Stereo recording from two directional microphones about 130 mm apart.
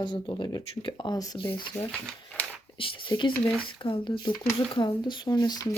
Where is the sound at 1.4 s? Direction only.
40° left (ahead or behind).